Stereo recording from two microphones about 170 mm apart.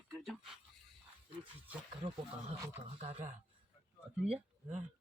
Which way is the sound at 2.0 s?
25° right (ahead or behind).